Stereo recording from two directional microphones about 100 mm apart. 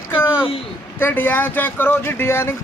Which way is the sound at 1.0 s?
20° left (ahead or behind).